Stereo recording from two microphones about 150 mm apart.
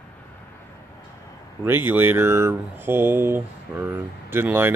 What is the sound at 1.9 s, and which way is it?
Speech, 15° right (ahead or behind).